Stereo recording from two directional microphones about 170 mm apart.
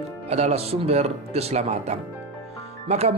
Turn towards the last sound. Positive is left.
turn(degrees=-40)  # may be behind; listen again after turning